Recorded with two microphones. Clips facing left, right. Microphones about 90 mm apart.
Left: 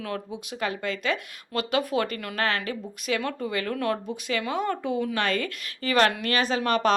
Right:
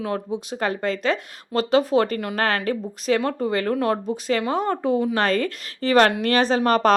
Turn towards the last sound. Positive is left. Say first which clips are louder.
# right 5 dB
turn(degrees=-40)  # may be behind; listen again after turning